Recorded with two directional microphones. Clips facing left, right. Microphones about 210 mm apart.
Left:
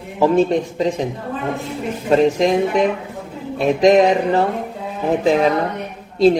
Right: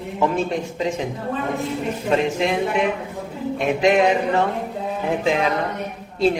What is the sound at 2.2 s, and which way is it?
A man's voice, 35° left (ahead or behind).